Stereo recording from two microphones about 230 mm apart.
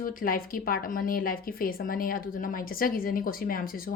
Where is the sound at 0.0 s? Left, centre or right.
Left.